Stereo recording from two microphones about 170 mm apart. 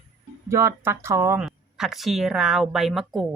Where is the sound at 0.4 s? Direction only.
15° right (ahead or behind).